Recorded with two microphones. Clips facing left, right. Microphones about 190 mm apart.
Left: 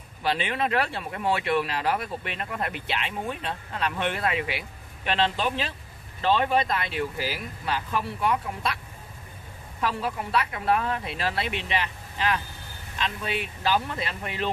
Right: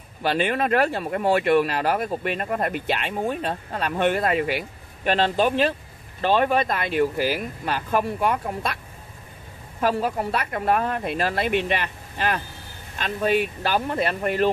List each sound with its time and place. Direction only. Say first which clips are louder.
0.2 s speech: right 4 dB; 50° right (ahead or behind)
9.8 s speech: right 6 dB; 45° right (ahead or behind)